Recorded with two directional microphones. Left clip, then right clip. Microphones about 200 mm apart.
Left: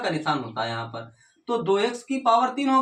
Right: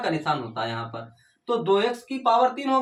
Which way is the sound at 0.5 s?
20° right (ahead or behind).